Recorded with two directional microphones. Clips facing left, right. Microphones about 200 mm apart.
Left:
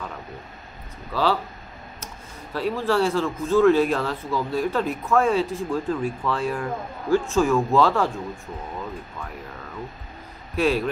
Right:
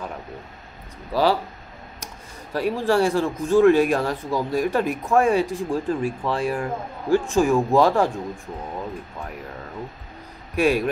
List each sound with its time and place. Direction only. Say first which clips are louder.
1.1 s speech: right 3 dB; 15° right (ahead or behind)
2.5 s speech: right 2 dB; 15° right (ahead or behind)
10.5 s speech: right 2 dB; 15° right (ahead or behind)